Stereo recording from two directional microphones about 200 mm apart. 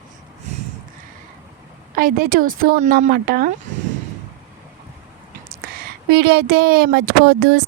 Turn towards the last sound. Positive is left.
turn(degrees=-55)  # may be behind; listen again after turning